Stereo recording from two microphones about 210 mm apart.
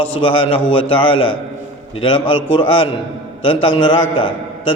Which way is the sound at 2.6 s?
25° left (ahead or behind).